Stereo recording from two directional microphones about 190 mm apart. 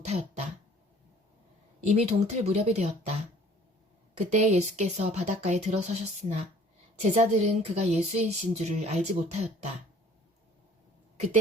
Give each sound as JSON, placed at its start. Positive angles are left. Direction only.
{"t": 0.0, "sound": "throat clearing", "side_deg": -35}
{"t": 1.9, "sound": "speech", "side_deg": -35}
{"t": 4.3, "sound": "speech", "side_deg": -35}